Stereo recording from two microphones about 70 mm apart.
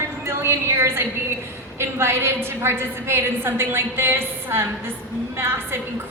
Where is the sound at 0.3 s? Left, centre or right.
Right.